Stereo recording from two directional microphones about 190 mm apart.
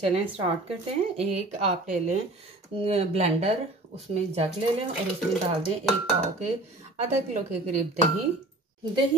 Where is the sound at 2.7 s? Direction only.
30° right (ahead or behind).